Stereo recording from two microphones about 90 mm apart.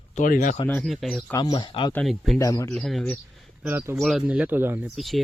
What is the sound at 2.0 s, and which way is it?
Speech, centre (ahead or behind).